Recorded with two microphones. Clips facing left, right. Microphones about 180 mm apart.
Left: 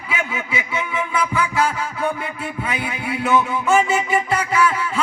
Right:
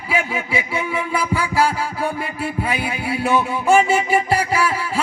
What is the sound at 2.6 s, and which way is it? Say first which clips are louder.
Music: right 2 dB; 30° right (ahead or behind).